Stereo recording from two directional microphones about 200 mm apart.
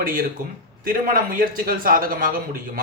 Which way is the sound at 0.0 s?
45° right (ahead or behind).